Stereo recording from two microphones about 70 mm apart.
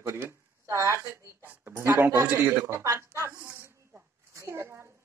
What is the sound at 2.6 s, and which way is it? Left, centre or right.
Speech, right.